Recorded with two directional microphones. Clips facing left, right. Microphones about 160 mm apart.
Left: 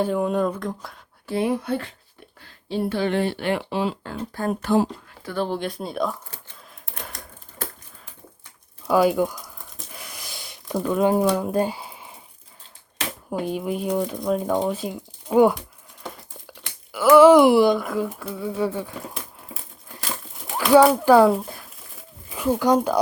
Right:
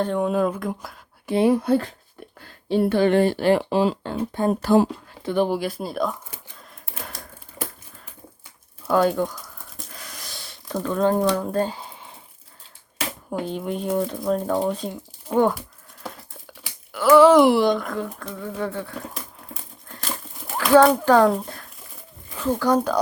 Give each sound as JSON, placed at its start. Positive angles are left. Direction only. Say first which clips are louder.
{"t": 0.0, "sound": "speech", "louder": "even", "side_deg": 5}
{"t": 1.5, "sound": "speech", "louder": "right 9 dB", "side_deg": -40}
{"t": 2.6, "sound": "speech", "louder": "right 5 dB", "side_deg": -55}
{"t": 4.0, "sound": "speech", "louder": "right 4 dB", "side_deg": -25}
{"t": 6.8, "sound": "a sound", "louder": "right 1 dB", "side_deg": -5}
{"t": 8.9, "sound": "a sound", "louder": "left 1 dB", "side_deg": 5}
{"t": 10.0, "sound": "a sound", "louder": "left 2 dB", "side_deg": 10}
{"t": 10.8, "sound": "speech", "louder": "left 1 dB", "side_deg": 10}
{"t": 13.6, "sound": "speech", "louder": "right 1 dB", "side_deg": 0}
{"t": 16.0, "sound": "a sound", "louder": "even", "side_deg": 0}
{"t": 17.2, "sound": "speech", "louder": "left 2 dB", "side_deg": 15}
{"t": 19.1, "sound": "crumpling", "louder": "even", "side_deg": 0}
{"t": 20.7, "sound": "speech", "louder": "left 1 dB", "side_deg": 5}